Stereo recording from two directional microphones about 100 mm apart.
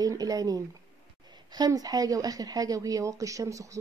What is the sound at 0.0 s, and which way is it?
Speech, 35° right (ahead or behind).